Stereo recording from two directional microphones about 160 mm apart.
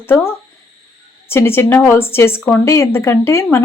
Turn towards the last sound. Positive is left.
turn(degrees=15)  # may be behind; listen again after turning